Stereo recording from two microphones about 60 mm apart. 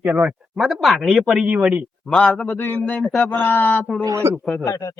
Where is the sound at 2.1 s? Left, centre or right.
Centre.